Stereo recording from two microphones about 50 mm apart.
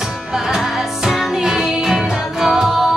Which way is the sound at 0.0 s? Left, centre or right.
Centre.